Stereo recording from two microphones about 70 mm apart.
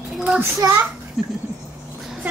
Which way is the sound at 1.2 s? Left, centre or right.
Centre.